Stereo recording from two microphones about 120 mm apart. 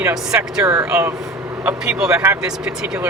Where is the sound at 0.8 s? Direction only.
25° right (ahead or behind).